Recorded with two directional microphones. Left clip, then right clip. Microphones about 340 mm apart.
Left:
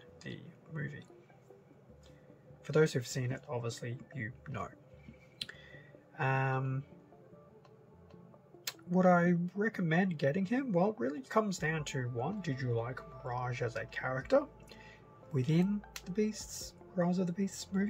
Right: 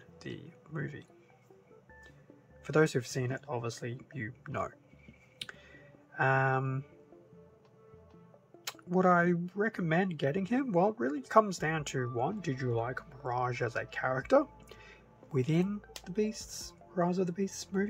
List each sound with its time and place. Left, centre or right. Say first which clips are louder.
0.2 s music: right 4 dB; centre
2.6 s speech: right 2 dB; centre
5.4 s clicking: even; centre
8.6 s speech: right 1 dB; centre